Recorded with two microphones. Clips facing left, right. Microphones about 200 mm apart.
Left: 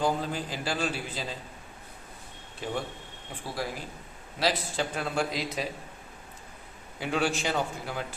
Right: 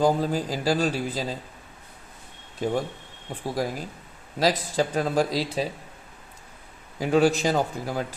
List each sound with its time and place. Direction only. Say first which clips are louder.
0.0 s a man's voice: right 6 dB; 40° right (ahead or behind)
2.6 s a man's voice: right 7 dB; 40° right (ahead or behind)
7.0 s a man's voice: right 8 dB; 40° right (ahead or behind)